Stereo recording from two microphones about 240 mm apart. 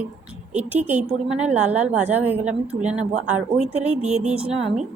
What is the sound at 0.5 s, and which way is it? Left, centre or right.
A woman's voice, centre.